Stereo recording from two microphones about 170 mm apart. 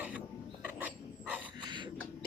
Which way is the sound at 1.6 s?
25° right (ahead or behind).